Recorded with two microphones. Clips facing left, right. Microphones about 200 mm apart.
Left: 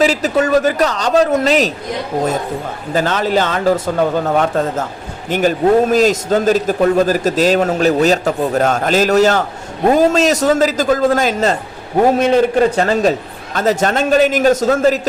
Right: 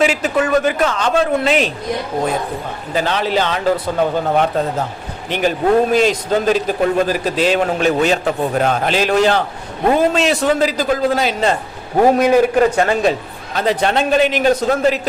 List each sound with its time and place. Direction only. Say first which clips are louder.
0.0 s a man's voice: left 2 dB; 40° left (ahead or behind)
2.9 s a man's voice: left 2 dB; 45° left (ahead or behind)
12.7 s a man's voice: left 1 dB; 40° left (ahead or behind)